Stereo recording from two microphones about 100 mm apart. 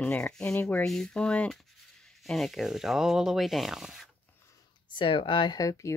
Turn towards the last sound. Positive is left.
turn(degrees=35)  # may be behind; listen again after turning